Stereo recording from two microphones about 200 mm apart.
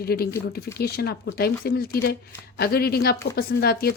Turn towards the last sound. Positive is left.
turn(degrees=50)  # may be behind; listen again after turning